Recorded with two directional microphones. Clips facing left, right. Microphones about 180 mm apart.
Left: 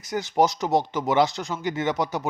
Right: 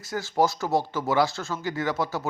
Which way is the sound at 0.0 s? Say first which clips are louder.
Left 2 dB; 20° left (ahead or behind).